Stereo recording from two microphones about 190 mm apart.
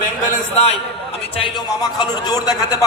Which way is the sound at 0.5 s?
35° left (ahead or behind).